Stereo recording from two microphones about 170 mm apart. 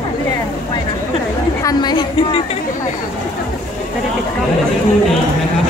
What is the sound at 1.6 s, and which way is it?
Speech, 25° left (ahead or behind).